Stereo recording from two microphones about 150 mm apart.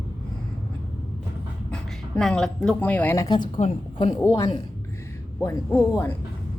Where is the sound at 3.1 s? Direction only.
25° left (ahead or behind).